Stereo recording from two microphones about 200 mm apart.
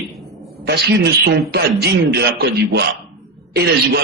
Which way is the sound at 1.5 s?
55° right (ahead or behind).